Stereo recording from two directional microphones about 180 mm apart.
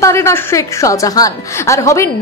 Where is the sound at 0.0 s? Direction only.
15° left (ahead or behind).